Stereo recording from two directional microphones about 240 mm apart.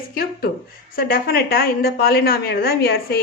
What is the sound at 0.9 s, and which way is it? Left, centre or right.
A woman's voice, left.